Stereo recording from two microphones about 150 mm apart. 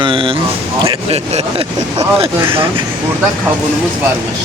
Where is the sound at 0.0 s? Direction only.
35° right (ahead or behind).